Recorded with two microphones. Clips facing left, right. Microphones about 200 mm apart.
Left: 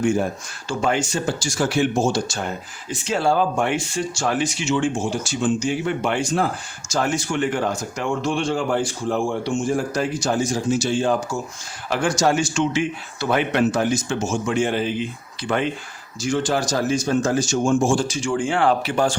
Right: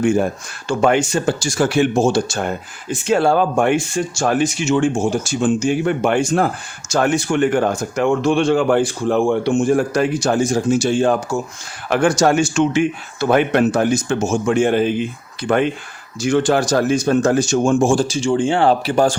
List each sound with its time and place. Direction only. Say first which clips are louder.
0.0 s speech: right 4 dB; 60° right (ahead or behind)
18.1 s speech: right 5 dB; 25° right (ahead or behind)